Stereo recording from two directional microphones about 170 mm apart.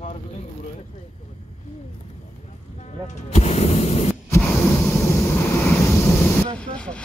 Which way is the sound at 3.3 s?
35° left (ahead or behind).